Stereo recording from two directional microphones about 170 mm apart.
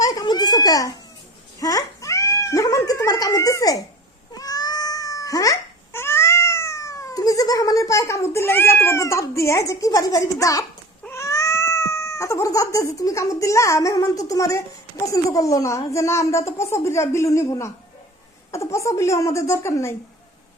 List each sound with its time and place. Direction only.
0.0 s a sound: 20° left (ahead or behind)
1.5 s cat: 20° left (ahead or behind)
11.0 s speech: 15° left (ahead or behind)